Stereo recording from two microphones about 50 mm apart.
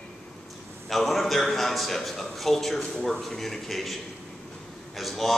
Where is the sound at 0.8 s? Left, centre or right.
Centre.